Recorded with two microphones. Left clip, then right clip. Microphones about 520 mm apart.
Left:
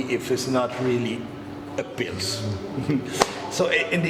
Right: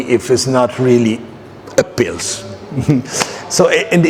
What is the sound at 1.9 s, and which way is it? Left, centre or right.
Speech, right.